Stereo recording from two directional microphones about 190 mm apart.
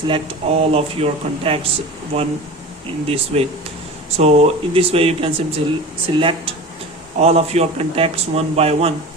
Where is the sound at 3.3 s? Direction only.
35° right (ahead or behind).